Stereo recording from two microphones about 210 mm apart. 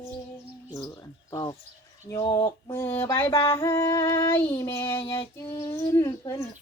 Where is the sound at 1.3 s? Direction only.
20° left (ahead or behind).